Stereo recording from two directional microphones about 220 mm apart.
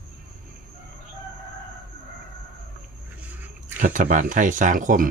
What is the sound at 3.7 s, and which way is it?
Speech, 35° right (ahead or behind).